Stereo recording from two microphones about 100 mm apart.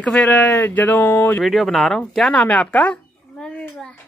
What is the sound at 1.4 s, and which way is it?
A child's voice, centre (ahead or behind).